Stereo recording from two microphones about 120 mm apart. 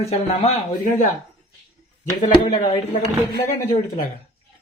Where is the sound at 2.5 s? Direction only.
65° left (ahead or behind).